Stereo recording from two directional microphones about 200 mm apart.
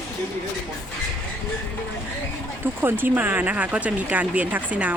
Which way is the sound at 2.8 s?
10° right (ahead or behind).